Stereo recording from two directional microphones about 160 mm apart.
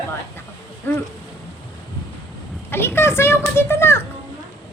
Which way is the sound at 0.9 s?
10° left (ahead or behind).